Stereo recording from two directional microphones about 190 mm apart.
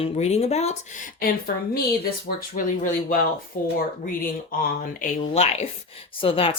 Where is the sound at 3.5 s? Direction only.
45° left (ahead or behind).